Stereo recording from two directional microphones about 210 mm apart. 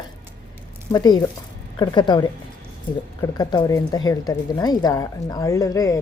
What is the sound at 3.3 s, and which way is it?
A woman's voice, 20° left (ahead or behind).